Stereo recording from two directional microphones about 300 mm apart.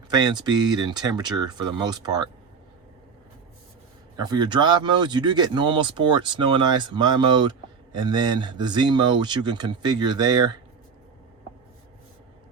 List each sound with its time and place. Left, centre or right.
0.1 s speech: centre
4.2 s speech: centre